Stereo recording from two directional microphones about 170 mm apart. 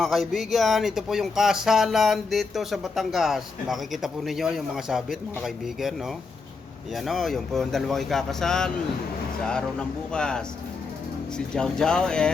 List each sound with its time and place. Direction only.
0.0 s speech: centre (ahead or behind)
6.9 s speech: centre (ahead or behind)